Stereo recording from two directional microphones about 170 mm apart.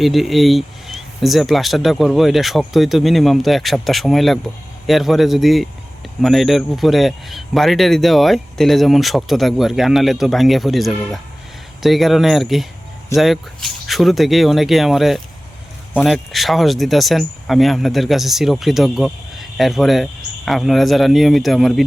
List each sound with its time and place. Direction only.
0.0 s speech: centre (ahead or behind)